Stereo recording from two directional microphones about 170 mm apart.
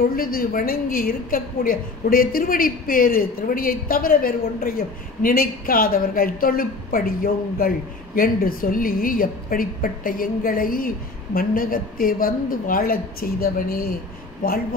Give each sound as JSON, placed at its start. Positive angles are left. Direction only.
{"t": 0.1, "sound": "a woman's voice", "side_deg": 60}